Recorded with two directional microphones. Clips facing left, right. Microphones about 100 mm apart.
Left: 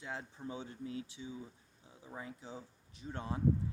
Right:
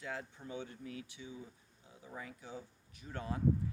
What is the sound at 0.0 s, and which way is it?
Speech, 25° left (ahead or behind).